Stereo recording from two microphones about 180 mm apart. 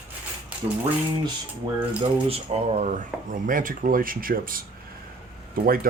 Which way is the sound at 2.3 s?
35° right (ahead or behind).